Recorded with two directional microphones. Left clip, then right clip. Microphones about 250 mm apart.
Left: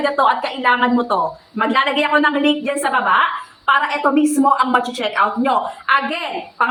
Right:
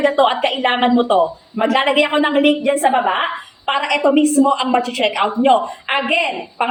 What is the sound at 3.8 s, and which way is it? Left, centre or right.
A woman's voice, centre.